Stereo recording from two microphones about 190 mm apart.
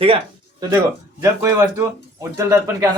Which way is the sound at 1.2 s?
15° right (ahead or behind).